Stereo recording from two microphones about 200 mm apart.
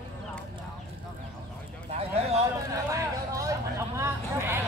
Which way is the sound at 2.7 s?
15° right (ahead or behind).